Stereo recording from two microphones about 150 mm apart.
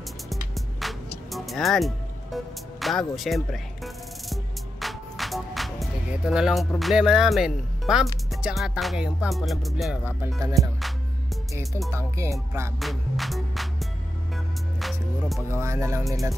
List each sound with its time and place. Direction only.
0.3 s music: centre (ahead or behind)
10.4 s music: 20° right (ahead or behind)
11.9 s music: 20° right (ahead or behind)
12.7 s music: centre (ahead or behind)
15.5 s music: 20° right (ahead or behind)